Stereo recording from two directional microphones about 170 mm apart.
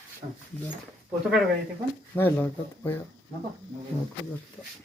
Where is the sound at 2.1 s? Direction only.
10° left (ahead or behind).